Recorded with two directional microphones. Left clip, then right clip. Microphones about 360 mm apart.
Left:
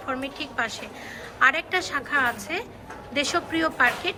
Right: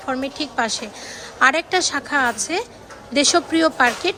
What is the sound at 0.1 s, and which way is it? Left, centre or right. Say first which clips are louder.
Speech: right 6 dB; centre.